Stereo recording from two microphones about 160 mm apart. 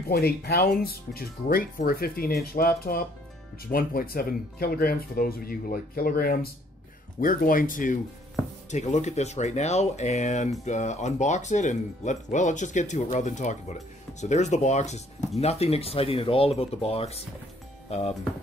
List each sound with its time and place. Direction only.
0.1 s speech: 75° left (ahead or behind); by 18.1 s 40° left (ahead or behind)